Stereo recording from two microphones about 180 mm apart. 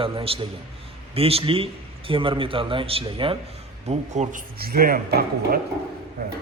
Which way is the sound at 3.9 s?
40° right (ahead or behind).